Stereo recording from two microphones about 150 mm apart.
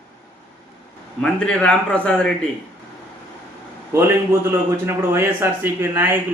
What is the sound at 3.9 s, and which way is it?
A man's voice, 15° right (ahead or behind).